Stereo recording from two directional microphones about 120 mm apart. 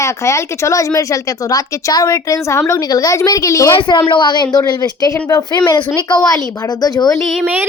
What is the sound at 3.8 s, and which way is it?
A woman's voice, 40° left (ahead or behind).